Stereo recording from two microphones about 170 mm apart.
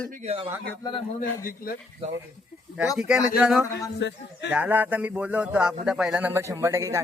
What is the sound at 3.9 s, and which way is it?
Speech, 90° left.